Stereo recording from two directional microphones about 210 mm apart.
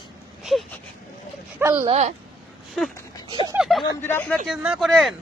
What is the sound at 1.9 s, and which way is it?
Speech, 30° right (ahead or behind).